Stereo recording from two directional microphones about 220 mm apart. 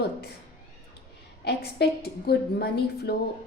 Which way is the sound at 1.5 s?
45° left (ahead or behind).